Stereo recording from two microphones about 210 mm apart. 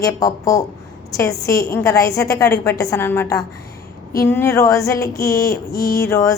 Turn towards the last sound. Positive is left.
turn(degrees=15)  # may be behind; listen again after turning